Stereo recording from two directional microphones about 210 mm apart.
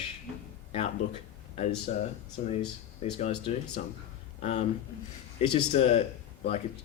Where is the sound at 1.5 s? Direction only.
35° left (ahead or behind).